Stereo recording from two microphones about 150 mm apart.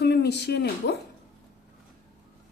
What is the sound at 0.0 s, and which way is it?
Speech, 90° left.